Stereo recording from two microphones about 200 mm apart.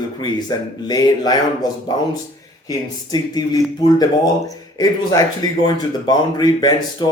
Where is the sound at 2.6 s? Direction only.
20° left (ahead or behind).